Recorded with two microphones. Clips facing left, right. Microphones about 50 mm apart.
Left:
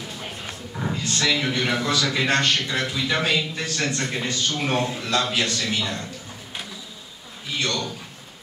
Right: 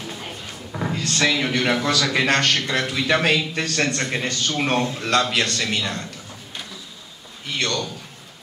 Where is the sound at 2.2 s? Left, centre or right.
Right.